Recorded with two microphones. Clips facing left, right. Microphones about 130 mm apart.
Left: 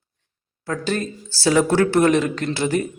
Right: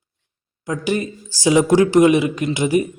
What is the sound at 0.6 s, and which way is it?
A man's voice, 15° right (ahead or behind).